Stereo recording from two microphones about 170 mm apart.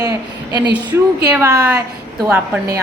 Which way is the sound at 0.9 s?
10° right (ahead or behind).